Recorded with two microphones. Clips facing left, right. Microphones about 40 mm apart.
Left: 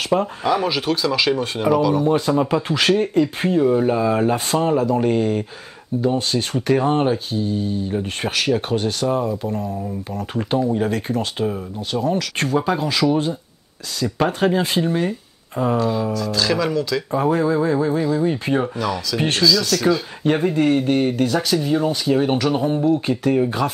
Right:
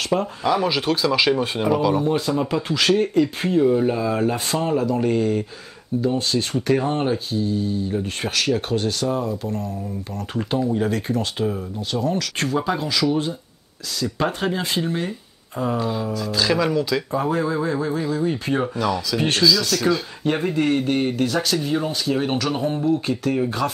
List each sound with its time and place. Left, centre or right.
0.1 s speech: centre
2.1 s speech: centre
3.0 s speech: centre
15.8 s speech: centre
17.1 s speech: centre
19.1 s speech: centre
19.4 s speech: centre